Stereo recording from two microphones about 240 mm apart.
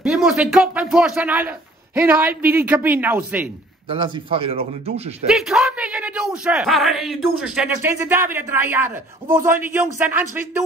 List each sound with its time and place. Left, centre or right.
0.0 s a man's voice: centre
3.9 s a man's voice: right
5.3 s a man's voice: centre